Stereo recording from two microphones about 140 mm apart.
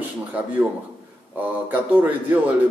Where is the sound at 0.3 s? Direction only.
10° right (ahead or behind).